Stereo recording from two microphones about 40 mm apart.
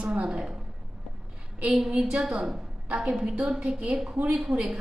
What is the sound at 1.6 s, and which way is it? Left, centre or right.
Speech, centre.